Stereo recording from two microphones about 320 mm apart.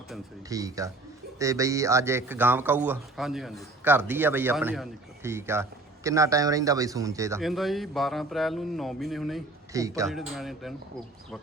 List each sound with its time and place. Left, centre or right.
0.4 s a man's voice: centre